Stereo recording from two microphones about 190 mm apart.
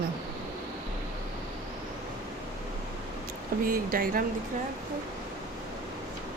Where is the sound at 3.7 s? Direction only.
50° right (ahead or behind).